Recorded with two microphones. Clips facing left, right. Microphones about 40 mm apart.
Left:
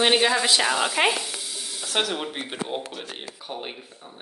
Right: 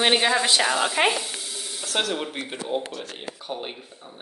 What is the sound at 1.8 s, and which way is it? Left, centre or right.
Speech, centre.